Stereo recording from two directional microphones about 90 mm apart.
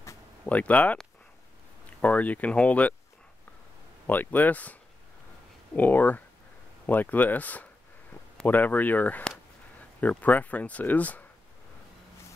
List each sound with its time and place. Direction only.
0.5 s speech: 15° left (ahead or behind)
2.0 s speech: 15° left (ahead or behind)
4.1 s speech: 20° left (ahead or behind)
5.8 s speech: 20° left (ahead or behind)